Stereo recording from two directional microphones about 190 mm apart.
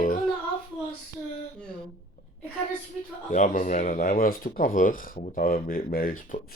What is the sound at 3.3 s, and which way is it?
Speech, 40° left (ahead or behind).